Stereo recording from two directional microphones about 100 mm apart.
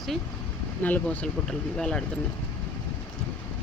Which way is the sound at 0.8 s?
15° left (ahead or behind).